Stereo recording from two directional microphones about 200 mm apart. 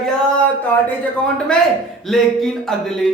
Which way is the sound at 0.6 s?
10° left (ahead or behind).